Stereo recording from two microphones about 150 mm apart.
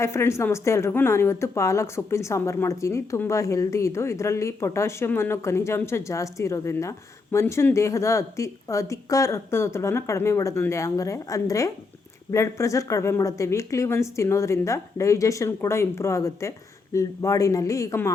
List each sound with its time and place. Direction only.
0.0 s a woman's voice: 20° left (ahead or behind)